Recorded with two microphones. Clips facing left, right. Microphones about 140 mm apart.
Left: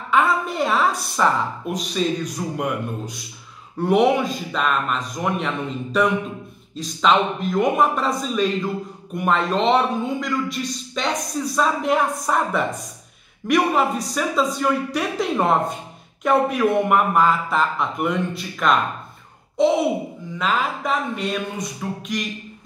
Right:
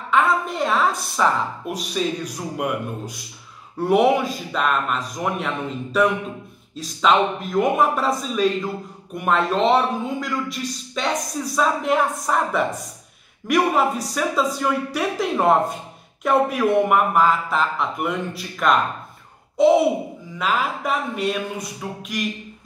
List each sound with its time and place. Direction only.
0.1 s a woman's voice: centre (ahead or behind)
3.8 s a man's voice: 5° right (ahead or behind)
20.3 s a man's voice: 5° right (ahead or behind)